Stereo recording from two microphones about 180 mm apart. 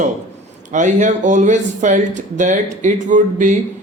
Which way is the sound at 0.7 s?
40° right (ahead or behind).